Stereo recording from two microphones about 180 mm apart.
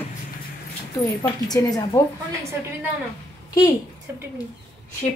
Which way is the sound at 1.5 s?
20° left (ahead or behind).